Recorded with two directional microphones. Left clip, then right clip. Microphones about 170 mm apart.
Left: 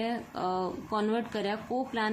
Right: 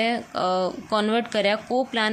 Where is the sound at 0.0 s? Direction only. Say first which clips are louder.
Right 9 dB; 25° right (ahead or behind).